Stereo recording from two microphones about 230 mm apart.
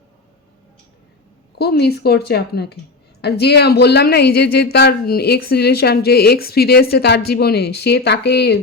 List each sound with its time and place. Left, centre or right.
1.5 s speech: left